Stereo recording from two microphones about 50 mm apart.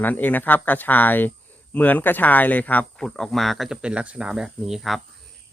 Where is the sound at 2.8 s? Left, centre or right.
Centre.